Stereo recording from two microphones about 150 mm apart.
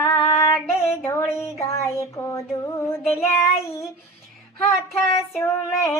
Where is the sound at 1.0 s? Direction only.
10° left (ahead or behind).